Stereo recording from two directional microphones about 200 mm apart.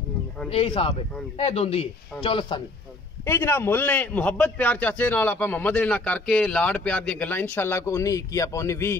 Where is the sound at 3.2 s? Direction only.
10° left (ahead or behind).